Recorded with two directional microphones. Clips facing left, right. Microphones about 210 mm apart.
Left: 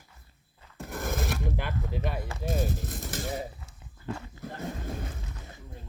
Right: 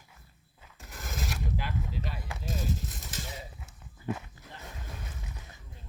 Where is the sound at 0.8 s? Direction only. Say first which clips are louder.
Left 8 dB; 55° left (ahead or behind).